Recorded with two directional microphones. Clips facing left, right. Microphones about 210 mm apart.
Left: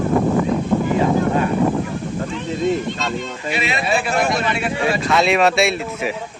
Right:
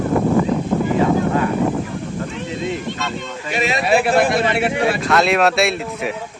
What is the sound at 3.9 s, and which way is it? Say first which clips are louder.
Speech: right 5 dB; 60° right (ahead or behind).